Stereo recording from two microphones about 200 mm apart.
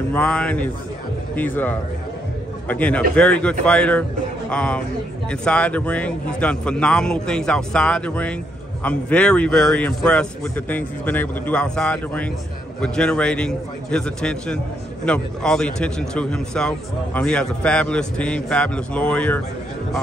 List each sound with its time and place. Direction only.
0.1 s a man's voice: 5° left (ahead or behind)